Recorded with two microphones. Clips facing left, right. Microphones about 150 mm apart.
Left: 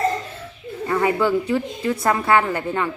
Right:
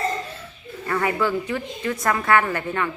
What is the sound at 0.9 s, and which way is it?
Speech, 20° left (ahead or behind).